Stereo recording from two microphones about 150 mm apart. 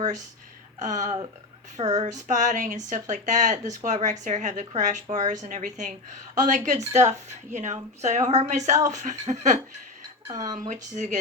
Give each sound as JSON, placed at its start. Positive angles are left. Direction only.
{"t": 0.8, "sound": "a woman's voice", "side_deg": -55}
{"t": 10.2, "sound": "speech", "side_deg": -25}
{"t": 10.5, "sound": "speech", "side_deg": -55}